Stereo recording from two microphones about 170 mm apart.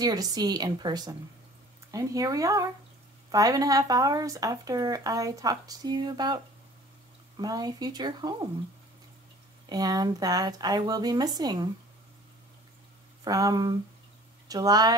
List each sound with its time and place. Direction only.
0.0 s speech: 20° right (ahead or behind)
9.7 s speech: 20° right (ahead or behind)
13.2 s speech: 20° right (ahead or behind)